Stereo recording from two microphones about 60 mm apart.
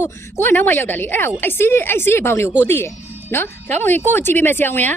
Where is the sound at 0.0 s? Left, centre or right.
Left.